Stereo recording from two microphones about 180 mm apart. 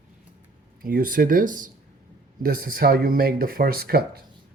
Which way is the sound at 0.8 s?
50° right (ahead or behind).